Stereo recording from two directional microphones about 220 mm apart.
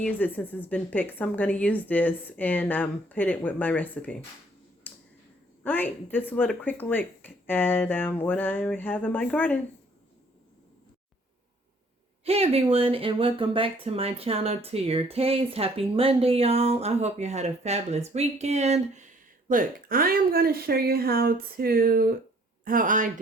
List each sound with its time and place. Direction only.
0.0 s a woman's voice: 10° left (ahead or behind)
4.9 s a sound: 10° left (ahead or behind)
5.6 s a woman's voice: 10° left (ahead or behind)
12.2 s speech: 25° right (ahead or behind)